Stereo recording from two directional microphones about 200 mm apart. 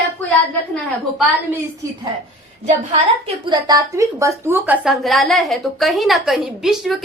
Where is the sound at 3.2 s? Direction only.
25° right (ahead or behind).